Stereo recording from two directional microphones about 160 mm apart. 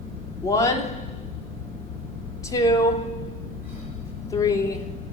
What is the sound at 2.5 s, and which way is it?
Speech, 20° left (ahead or behind).